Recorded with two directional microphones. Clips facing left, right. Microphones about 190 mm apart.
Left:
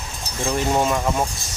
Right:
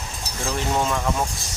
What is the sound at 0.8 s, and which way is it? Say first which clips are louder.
Speech: left 3 dB; 15° left (ahead or behind).